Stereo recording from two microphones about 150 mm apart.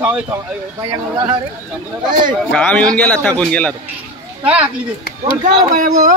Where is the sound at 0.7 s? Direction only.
30° right (ahead or behind).